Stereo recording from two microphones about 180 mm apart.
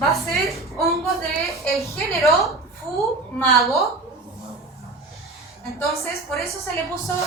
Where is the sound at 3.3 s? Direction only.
Centre (ahead or behind).